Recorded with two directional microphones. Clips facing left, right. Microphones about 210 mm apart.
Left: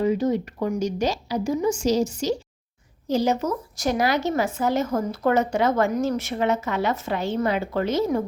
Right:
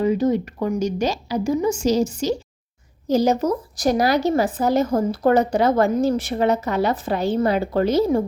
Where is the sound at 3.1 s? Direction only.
40° right (ahead or behind).